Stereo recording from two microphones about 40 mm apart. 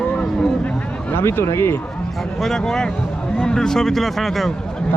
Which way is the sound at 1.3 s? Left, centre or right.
Left.